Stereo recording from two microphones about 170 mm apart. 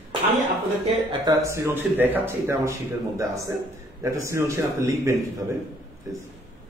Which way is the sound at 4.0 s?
15° right (ahead or behind).